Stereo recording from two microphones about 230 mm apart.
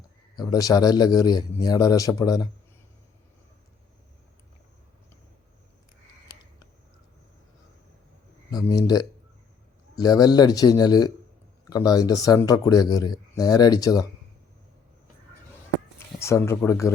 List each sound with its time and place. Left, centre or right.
0.3 s speech: centre
8.4 s speech: centre
16.2 s speech: centre